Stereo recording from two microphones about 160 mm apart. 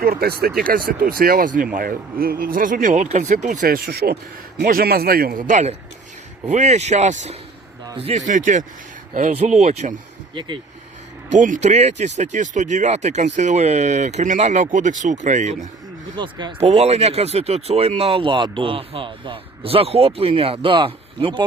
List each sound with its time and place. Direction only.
0.0 s speech: 70° right (ahead or behind); by 7.3 s 50° right (ahead or behind)
7.9 s speech: 35° right (ahead or behind)
11.3 s speech: 55° right (ahead or behind)
16.1 s speech: 30° right (ahead or behind)